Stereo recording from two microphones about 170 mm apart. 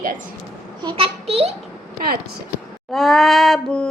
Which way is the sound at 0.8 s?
30° right (ahead or behind).